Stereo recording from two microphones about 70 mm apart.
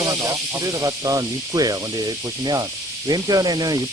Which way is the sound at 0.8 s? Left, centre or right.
Right.